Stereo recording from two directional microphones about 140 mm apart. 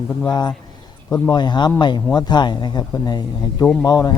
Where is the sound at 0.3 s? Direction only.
30° left (ahead or behind).